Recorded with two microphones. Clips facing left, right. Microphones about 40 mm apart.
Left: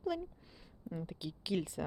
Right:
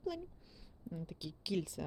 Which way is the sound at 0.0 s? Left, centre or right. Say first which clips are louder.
Left 4 dB; centre.